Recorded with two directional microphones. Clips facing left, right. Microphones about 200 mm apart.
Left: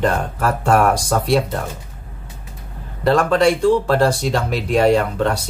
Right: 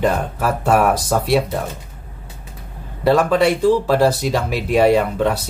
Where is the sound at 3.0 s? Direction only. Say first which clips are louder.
Even; 5° right (ahead or behind).